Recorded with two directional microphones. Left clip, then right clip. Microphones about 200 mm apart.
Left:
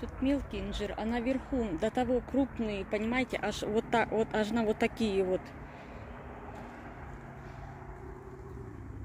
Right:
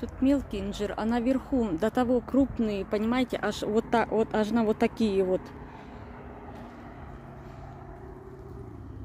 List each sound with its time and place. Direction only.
0.0 s speech: 25° right (ahead or behind)